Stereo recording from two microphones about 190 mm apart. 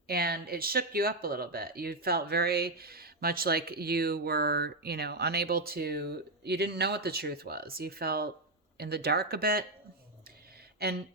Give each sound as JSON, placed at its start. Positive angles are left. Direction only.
{"t": 0.1, "sound": "speech", "side_deg": -55}
{"t": 10.8, "sound": "speech", "side_deg": -55}